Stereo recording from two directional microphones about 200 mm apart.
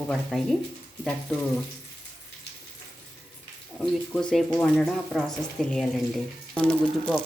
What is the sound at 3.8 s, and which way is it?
Speech, 5° left (ahead or behind).